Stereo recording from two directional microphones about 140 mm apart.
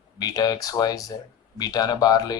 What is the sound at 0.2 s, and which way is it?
Speech, 25° left (ahead or behind).